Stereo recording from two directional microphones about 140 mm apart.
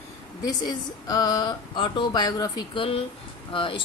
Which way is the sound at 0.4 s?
30° left (ahead or behind).